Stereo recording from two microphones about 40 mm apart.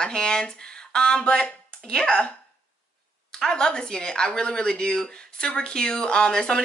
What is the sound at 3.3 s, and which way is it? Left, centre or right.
Speech, centre.